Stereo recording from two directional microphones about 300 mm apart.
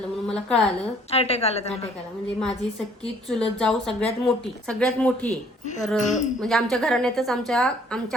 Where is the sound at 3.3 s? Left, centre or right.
Centre.